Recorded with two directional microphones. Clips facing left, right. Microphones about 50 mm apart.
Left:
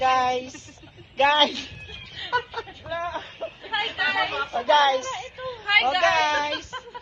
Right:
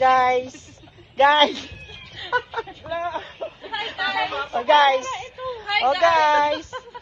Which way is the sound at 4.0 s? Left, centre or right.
Left.